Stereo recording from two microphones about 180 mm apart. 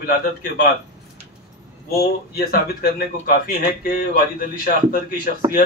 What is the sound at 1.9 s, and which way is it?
A man's voice, 55° left (ahead or behind).